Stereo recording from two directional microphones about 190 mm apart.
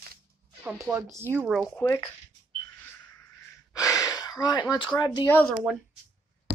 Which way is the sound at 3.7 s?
20° left (ahead or behind).